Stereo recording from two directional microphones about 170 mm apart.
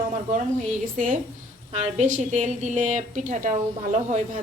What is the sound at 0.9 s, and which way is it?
A woman's voice, 50° right (ahead or behind).